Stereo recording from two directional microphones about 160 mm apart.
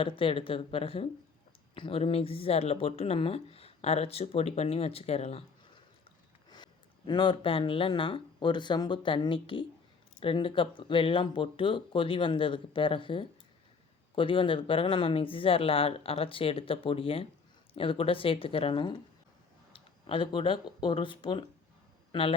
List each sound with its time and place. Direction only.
0.0 s speech: 35° left (ahead or behind)
7.1 s speech: 30° left (ahead or behind)